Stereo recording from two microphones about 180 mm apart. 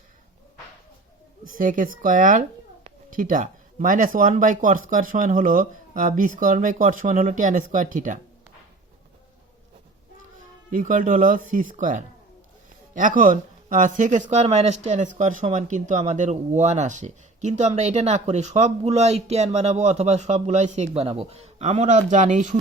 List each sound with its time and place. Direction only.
1.5 s speech: 50° right (ahead or behind)
10.7 s speech: 50° right (ahead or behind)